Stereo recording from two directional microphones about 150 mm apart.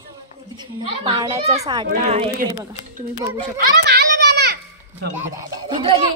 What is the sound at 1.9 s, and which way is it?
Speech, 50° right (ahead or behind).